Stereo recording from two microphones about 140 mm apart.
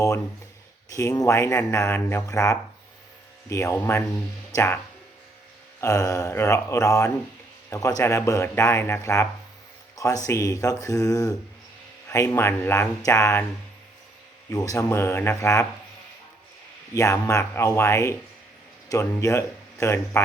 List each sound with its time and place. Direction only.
0.9 s a man's voice: 25° left (ahead or behind)
5.8 s a man's voice: 25° left (ahead or behind)
14.5 s a man's voice: 25° left (ahead or behind)
16.9 s a man's voice: 20° left (ahead or behind)
19.2 s speech: 20° left (ahead or behind)